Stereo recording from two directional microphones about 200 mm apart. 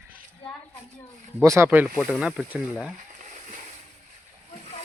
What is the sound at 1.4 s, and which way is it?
Speech, 15° right (ahead or behind).